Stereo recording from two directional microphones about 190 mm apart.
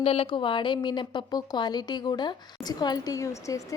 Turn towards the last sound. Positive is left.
turn(degrees=15)  # may be behind; listen again after turning